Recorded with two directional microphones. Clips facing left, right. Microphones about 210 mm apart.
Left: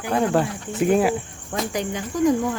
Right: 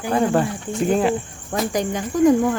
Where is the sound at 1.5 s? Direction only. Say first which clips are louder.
Right 4 dB; 45° right (ahead or behind).